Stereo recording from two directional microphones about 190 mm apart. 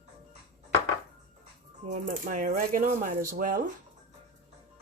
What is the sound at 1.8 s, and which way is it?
Speech, 40° right (ahead or behind).